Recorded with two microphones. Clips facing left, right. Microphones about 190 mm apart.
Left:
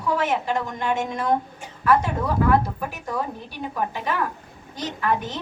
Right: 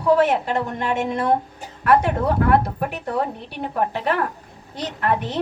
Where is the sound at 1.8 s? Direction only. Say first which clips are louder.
Right 3 dB; 65° right (ahead or behind).